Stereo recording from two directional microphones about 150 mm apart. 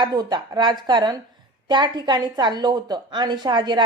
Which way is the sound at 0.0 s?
25° right (ahead or behind).